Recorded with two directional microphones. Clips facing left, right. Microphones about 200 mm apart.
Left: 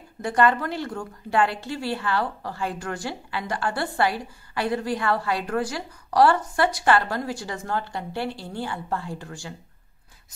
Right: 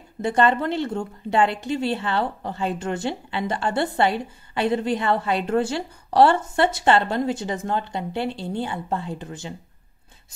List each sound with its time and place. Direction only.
0.2 s a woman's voice: 25° right (ahead or behind)